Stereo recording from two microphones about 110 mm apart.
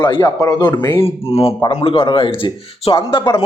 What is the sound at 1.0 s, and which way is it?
Speech, 60° left (ahead or behind).